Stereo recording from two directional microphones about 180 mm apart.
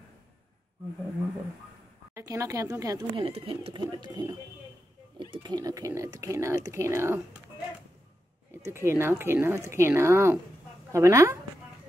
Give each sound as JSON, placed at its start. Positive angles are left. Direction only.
{"t": 2.1, "sound": "speech", "side_deg": -15}
{"t": 3.2, "sound": "speech", "side_deg": -30}
{"t": 8.5, "sound": "speech", "side_deg": -15}